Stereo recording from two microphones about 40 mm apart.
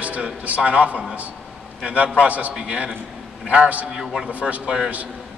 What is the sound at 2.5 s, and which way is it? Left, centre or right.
Speech, right.